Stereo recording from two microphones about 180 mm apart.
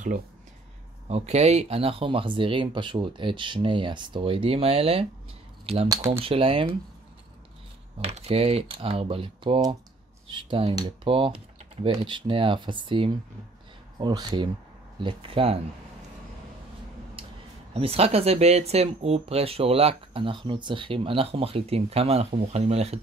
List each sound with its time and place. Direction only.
1.0 s speech: 35° right (ahead or behind)
8.0 s speech: 35° right (ahead or behind)
17.7 s speech: 35° right (ahead or behind)